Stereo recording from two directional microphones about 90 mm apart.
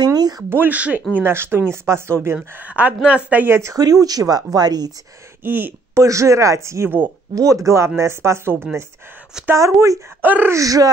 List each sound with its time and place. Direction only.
0.0 s a sound: 50° right (ahead or behind)
0.5 s speech: 20° right (ahead or behind)
2.5 s speech: 15° right (ahead or behind)
3.7 s speech: 45° right (ahead or behind)
5.4 s speech: 25° right (ahead or behind)
6.0 s speech: 35° right (ahead or behind)
10.2 s speech: 20° right (ahead or behind)
10.5 s speech: 40° right (ahead or behind)